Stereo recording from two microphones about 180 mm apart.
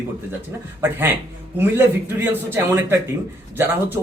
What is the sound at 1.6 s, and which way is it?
Speech, 15° right (ahead or behind).